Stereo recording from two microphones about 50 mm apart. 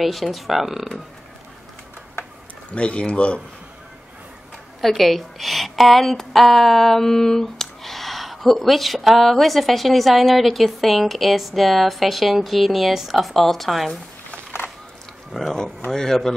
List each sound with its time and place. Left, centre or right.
0.0 s a woman's voice: centre
2.7 s speech: left
4.8 s a woman's voice: centre
15.3 s a woman's voice: centre
15.9 s speech: centre